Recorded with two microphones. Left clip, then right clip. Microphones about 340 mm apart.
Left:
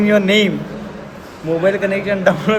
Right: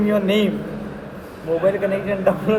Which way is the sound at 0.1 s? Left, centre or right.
Left.